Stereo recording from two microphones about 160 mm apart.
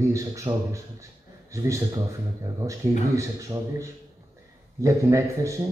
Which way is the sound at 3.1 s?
20° right (ahead or behind).